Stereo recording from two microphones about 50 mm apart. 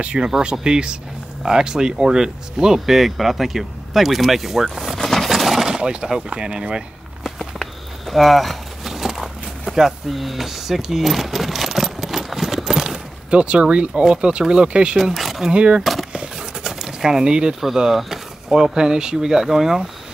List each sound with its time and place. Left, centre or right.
0.0 s speech: right
7.2 s walk: centre
8.1 s a sound: centre
13.3 s speech: right
15.0 s speech: centre
15.5 s speech: right
15.8 s skateboard: centre
16.1 s a sound: centre
16.8 s speech: centre